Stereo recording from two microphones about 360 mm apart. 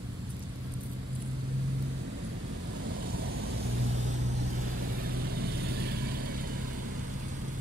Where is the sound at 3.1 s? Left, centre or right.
Right.